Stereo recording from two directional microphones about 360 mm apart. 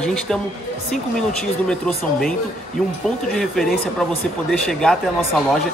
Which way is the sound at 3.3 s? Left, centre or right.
Centre.